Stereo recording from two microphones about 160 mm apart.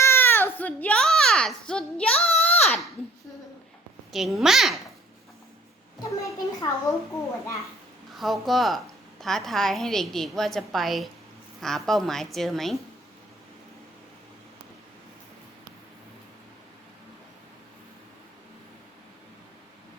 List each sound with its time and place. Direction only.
0.0 s a sound: 15° left (ahead or behind)
4.1 s a woman's voice: centre (ahead or behind)
6.0 s a child's voice: 20° left (ahead or behind)
8.1 s a woman's voice: centre (ahead or behind)